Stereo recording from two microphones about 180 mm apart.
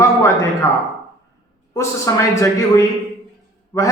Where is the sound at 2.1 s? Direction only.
15° left (ahead or behind).